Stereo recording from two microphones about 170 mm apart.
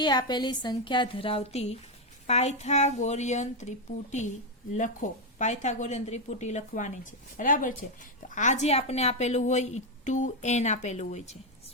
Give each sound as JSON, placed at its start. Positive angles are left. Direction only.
{"t": 0.0, "sound": "a woman's voice", "side_deg": 25}